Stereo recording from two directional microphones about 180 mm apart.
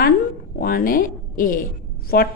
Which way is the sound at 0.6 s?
50° left (ahead or behind).